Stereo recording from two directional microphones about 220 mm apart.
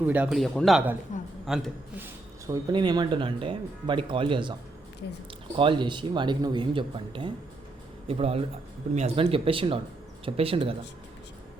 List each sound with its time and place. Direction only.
0.0 s a man's voice: 5° right (ahead or behind)
2.7 s speech: 20° right (ahead or behind)
5.5 s speech: 20° right (ahead or behind)